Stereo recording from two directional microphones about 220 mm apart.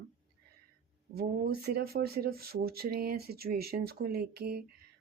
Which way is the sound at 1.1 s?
45° right (ahead or behind).